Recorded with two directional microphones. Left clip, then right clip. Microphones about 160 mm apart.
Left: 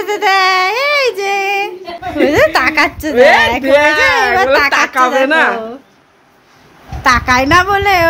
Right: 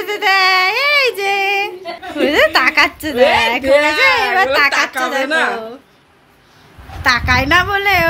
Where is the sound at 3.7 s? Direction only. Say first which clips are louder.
Left 3 dB; 65° left (ahead or behind).